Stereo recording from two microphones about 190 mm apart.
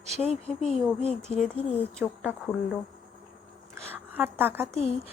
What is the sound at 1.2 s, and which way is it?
Speech, 5° left (ahead or behind).